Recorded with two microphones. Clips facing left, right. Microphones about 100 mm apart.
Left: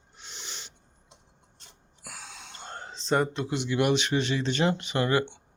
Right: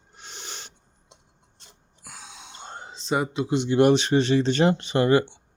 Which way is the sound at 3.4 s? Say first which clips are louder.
Right 7 dB; 25° right (ahead or behind).